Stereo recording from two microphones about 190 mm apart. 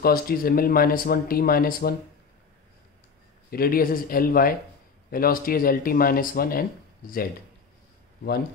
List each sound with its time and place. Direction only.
0.0 s speech: 50° left (ahead or behind)
3.4 s speech: 50° left (ahead or behind)